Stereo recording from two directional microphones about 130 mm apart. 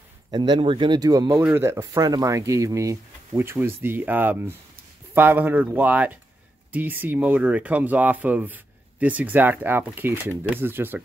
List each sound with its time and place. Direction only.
0.3 s speech: 35° right (ahead or behind)
1.4 s speech: 20° right (ahead or behind)